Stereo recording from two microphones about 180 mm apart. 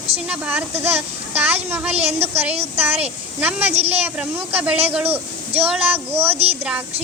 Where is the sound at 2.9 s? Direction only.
5° right (ahead or behind).